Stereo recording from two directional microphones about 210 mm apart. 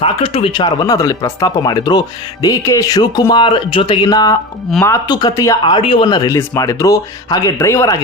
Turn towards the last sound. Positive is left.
turn(degrees=15)  # may be behind; listen again after turning